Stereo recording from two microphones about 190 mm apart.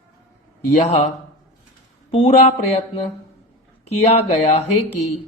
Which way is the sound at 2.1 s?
35° left (ahead or behind).